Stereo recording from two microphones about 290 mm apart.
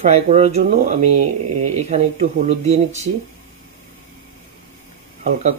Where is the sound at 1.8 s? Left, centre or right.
Right.